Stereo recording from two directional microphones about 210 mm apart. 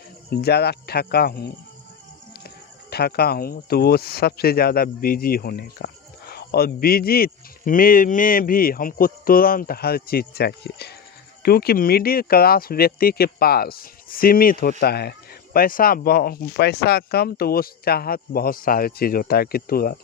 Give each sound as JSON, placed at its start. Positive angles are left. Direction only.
{"t": 0.3, "sound": "speech", "side_deg": 50}
{"t": 2.9, "sound": "speech", "side_deg": 50}